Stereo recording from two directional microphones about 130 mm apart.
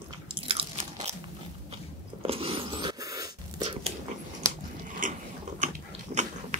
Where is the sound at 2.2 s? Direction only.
45° right (ahead or behind); by 3.3 s 25° right (ahead or behind).